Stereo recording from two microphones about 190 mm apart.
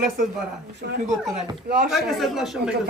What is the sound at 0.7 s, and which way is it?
Speech, 60° right (ahead or behind).